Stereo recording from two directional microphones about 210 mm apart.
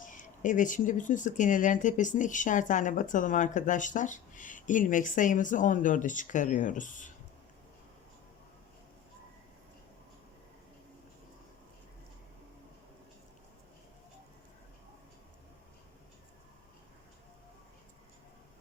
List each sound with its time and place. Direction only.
0.0 s speech: 40° left (ahead or behind)